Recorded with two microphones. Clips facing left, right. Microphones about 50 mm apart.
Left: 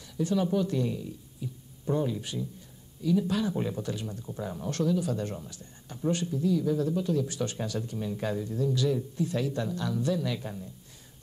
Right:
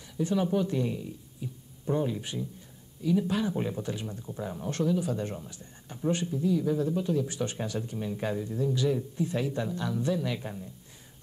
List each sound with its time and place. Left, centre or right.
0.2 s speech: right
4.3 s speech: centre